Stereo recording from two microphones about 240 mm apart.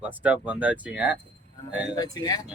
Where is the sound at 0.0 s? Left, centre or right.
Centre.